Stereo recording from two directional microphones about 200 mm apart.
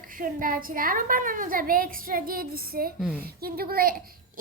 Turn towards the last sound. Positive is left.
turn(degrees=-45)  # may be behind; listen again after turning